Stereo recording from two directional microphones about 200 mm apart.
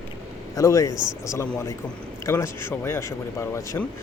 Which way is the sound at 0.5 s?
15° left (ahead or behind).